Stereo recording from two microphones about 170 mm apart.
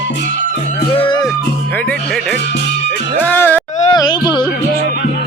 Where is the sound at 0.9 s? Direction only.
30° left (ahead or behind).